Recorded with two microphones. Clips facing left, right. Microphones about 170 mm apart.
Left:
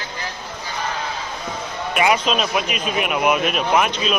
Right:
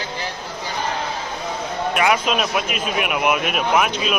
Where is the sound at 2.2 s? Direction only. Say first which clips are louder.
Even; 10° right (ahead or behind).